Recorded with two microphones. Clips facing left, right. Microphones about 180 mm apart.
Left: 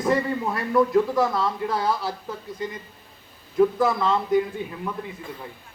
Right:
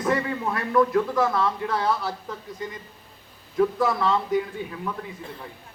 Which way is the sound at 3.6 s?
10° left (ahead or behind).